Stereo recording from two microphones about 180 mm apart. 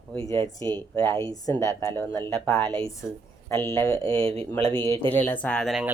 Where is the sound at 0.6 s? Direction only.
25° right (ahead or behind).